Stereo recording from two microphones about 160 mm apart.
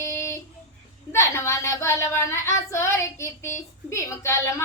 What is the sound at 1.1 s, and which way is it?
Child singing, 15° left (ahead or behind).